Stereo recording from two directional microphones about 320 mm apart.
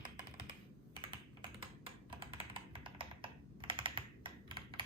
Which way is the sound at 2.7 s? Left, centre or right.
Centre.